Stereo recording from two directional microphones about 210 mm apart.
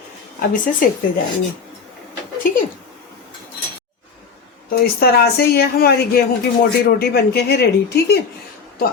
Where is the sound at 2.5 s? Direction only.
40° left (ahead or behind).